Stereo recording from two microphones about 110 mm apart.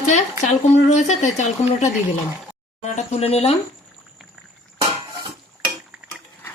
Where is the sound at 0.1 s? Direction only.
90° left; by 3.5 s 70° left (ahead or behind).